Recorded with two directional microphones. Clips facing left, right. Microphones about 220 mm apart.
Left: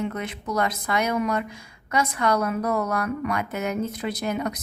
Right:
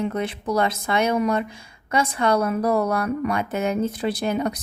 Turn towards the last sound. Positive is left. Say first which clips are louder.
# right 3 dB
turn(degrees=-30)  # may be behind; listen again after turning